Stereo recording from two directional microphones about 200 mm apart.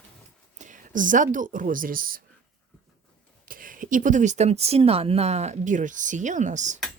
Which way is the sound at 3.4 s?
45° right (ahead or behind).